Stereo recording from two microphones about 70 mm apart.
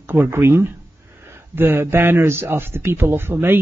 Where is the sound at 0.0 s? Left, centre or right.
Right.